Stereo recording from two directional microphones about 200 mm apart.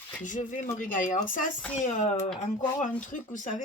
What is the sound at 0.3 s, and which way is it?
Speech, 40° left (ahead or behind).